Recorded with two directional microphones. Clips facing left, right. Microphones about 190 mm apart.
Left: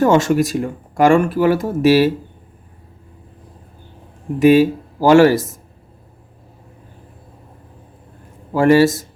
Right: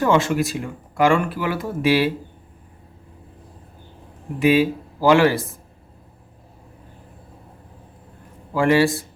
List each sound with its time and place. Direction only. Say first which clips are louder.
0.0 s speech: left 5 dB; 45° left (ahead or behind)
4.4 s speech: left 6 dB; 45° left (ahead or behind)
8.5 s speech: left 5 dB; 40° left (ahead or behind)